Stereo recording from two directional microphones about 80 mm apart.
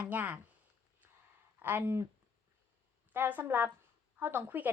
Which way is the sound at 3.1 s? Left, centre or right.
Right.